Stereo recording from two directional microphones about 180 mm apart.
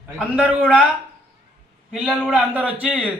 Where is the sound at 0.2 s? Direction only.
5° right (ahead or behind).